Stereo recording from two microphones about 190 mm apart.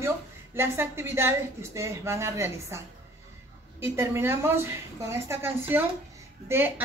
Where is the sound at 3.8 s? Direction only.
15° right (ahead or behind).